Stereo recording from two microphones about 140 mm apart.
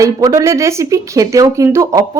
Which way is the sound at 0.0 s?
25° right (ahead or behind).